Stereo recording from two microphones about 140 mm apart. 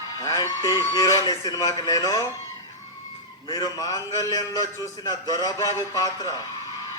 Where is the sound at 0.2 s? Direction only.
25° left (ahead or behind).